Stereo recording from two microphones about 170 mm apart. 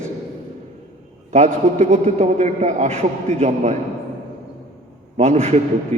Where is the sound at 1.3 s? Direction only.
45° right (ahead or behind).